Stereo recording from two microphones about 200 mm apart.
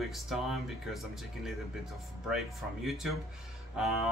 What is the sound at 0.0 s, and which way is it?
Speech, centre (ahead or behind).